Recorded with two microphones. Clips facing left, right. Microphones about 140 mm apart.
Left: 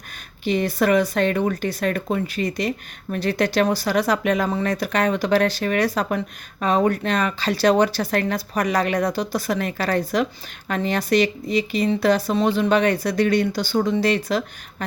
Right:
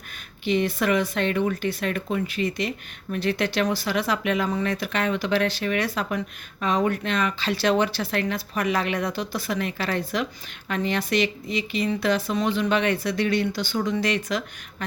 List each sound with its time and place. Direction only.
0.4 s speech: 40° left (ahead or behind)